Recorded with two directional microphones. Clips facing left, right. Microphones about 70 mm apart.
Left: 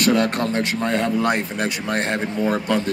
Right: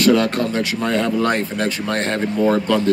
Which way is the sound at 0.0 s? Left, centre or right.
Left.